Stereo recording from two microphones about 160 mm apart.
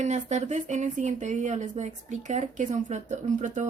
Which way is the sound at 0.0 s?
45° right (ahead or behind).